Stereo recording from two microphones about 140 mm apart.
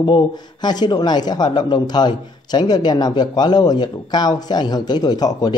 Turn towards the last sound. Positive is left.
turn(degrees=30)  # may be behind; listen again after turning